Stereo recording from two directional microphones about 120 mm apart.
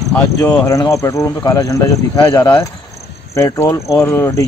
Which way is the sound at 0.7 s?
25° left (ahead or behind).